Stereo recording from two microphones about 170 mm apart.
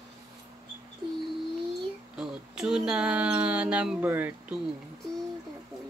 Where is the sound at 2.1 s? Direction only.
5° right (ahead or behind).